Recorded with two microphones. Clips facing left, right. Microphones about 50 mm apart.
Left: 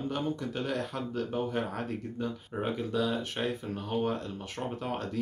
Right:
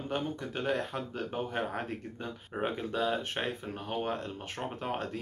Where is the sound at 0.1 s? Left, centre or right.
Right.